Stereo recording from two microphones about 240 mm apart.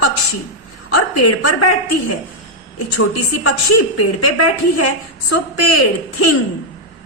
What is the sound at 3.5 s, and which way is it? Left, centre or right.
Speech, left.